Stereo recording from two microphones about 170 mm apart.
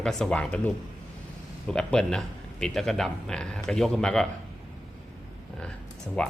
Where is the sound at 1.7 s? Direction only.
5° left (ahead or behind).